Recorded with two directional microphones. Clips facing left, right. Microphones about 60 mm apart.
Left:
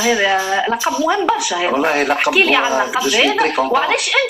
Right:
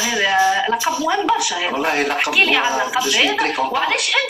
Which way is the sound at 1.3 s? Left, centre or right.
Centre.